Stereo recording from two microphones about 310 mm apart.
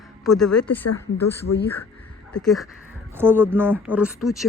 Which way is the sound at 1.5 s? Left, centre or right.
Left.